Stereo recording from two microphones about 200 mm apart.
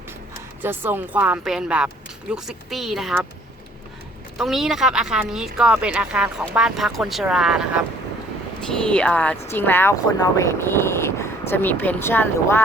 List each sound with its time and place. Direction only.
0.6 s speech: 10° right (ahead or behind)
4.4 s speech: centre (ahead or behind)